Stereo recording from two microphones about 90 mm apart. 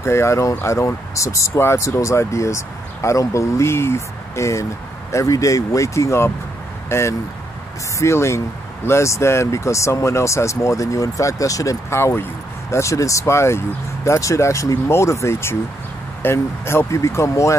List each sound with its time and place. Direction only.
0.0 s speech: 30° left (ahead or behind)